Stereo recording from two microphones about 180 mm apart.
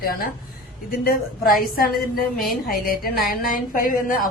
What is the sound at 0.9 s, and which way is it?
A woman's voice, 55° left (ahead or behind).